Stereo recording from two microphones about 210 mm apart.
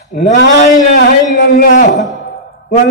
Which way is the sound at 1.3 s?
40° left (ahead or behind).